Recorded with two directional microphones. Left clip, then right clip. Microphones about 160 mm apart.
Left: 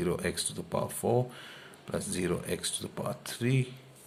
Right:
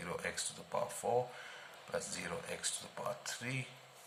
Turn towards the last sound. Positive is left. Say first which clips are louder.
# left 8 dB
turn(degrees=35)  # may be behind; listen again after turning